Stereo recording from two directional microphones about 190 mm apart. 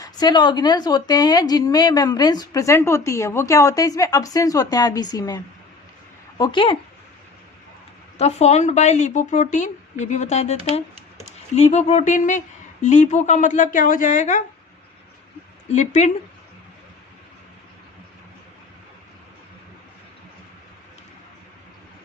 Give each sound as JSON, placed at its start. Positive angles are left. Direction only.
{"t": 0.0, "sound": "speech", "side_deg": 20}
{"t": 8.2, "sound": "a woman's voice", "side_deg": 35}
{"t": 15.7, "sound": "a woman's voice", "side_deg": 35}